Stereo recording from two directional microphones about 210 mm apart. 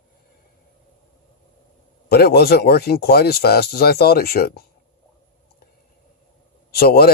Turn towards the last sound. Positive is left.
turn(degrees=45)  # may be behind; listen again after turning